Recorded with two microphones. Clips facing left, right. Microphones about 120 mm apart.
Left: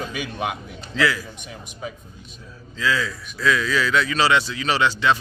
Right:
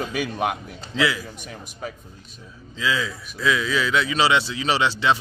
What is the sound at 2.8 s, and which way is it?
A man's voice, 15° right (ahead or behind).